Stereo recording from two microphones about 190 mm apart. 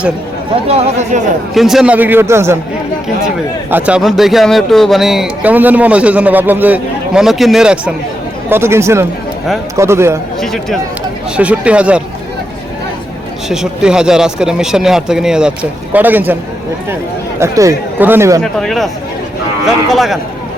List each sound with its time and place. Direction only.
0.7 s speech: 35° right (ahead or behind)
1.5 s speech: centre (ahead or behind)
3.7 s a man's voice: 10° right (ahead or behind)
10.4 s a man's voice: centre (ahead or behind)
13.5 s a man's voice: 5° right (ahead or behind)
17.4 s speech: 15° right (ahead or behind)
18.6 s a man's voice: centre (ahead or behind)
19.9 s a man's voice: centre (ahead or behind)